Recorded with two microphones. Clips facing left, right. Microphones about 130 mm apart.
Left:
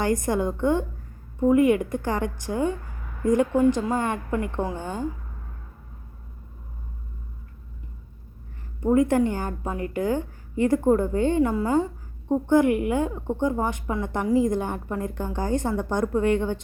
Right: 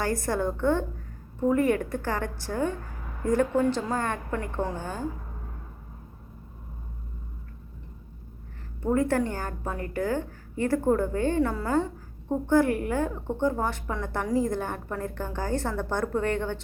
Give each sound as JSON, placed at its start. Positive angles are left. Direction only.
{"t": 0.0, "sound": "a woman's voice", "side_deg": 20}
{"t": 8.8, "sound": "a woman's voice", "side_deg": 15}